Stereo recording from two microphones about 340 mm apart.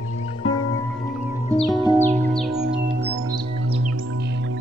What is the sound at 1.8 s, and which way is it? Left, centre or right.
Music, centre.